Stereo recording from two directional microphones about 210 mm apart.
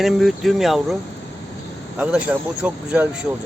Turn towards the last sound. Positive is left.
turn(degrees=-5)  # may be behind; listen again after turning